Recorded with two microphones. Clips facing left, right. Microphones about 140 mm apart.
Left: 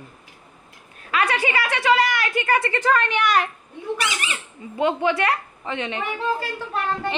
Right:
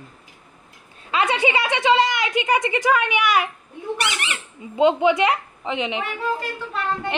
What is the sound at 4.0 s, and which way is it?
Speech, 65° right (ahead or behind).